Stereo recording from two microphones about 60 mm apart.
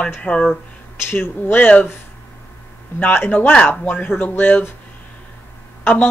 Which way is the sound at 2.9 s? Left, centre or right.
Left.